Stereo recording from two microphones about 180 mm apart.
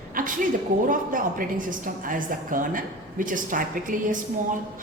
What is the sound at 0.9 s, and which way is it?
A woman's voice, 50° right (ahead or behind).